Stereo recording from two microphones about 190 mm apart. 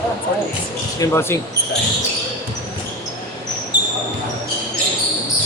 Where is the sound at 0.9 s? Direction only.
15° left (ahead or behind).